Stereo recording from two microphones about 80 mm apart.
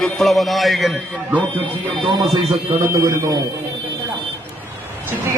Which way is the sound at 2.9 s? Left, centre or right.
Right.